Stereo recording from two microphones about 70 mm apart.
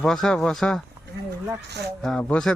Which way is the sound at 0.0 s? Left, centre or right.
Centre.